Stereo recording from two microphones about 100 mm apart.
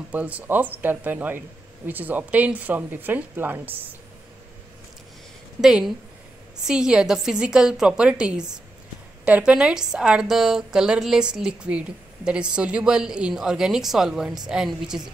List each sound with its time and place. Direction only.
0.1 s a woman's voice: 15° right (ahead or behind)
5.6 s a woman's voice: 5° right (ahead or behind)